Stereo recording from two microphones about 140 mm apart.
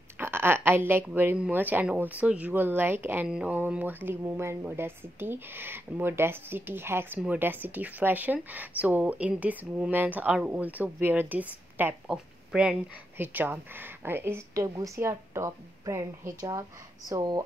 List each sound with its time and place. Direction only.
0.2 s a woman's voice: 15° right (ahead or behind)